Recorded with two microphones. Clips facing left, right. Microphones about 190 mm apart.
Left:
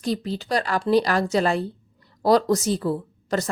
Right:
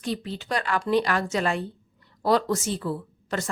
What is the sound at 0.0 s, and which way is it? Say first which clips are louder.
A woman's voice: left 4 dB; 40° left (ahead or behind).